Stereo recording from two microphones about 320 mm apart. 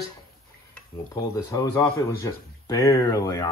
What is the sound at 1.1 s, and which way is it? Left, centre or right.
Speech, centre.